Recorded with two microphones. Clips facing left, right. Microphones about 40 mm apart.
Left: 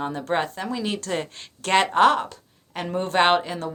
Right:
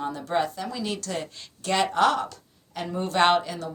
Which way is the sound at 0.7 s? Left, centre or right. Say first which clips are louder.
Left 6 dB; left.